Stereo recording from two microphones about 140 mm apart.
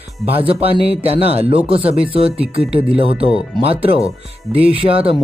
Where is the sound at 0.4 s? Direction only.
45° right (ahead or behind).